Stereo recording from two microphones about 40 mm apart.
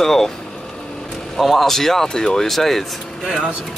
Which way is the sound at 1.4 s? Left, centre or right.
Centre.